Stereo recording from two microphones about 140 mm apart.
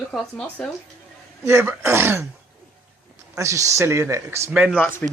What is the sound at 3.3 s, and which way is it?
A man's voice, 20° right (ahead or behind).